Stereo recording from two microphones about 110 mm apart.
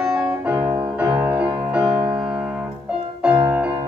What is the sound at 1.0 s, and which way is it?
Music, 20° right (ahead or behind).